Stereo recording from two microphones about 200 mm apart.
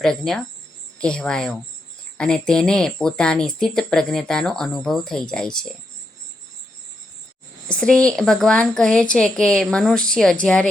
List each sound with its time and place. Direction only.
0.0 s speech: centre (ahead or behind)
7.7 s speech: 5° left (ahead or behind)